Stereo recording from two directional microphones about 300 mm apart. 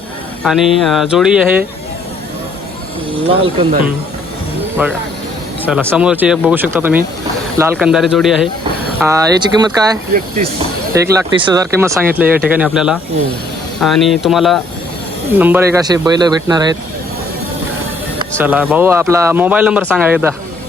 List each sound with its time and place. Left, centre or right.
0.4 s speech: centre
3.2 s speech: centre
4.8 s speech: centre
10.2 s speech: right
10.9 s speech: centre
18.3 s speech: centre